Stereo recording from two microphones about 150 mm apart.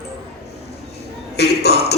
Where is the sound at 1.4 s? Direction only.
90° left.